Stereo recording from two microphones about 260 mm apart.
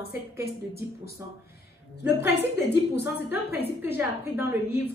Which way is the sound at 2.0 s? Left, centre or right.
Centre.